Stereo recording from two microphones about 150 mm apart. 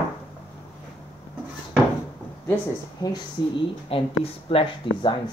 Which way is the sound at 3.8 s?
40° left (ahead or behind).